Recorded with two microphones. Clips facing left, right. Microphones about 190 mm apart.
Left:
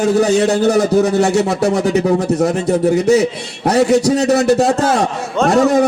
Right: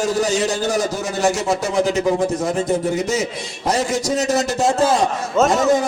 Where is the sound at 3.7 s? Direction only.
65° left (ahead or behind).